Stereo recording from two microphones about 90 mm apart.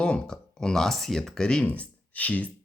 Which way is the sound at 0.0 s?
10° left (ahead or behind).